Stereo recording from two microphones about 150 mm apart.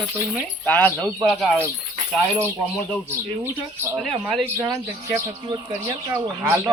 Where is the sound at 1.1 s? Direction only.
Centre (ahead or behind).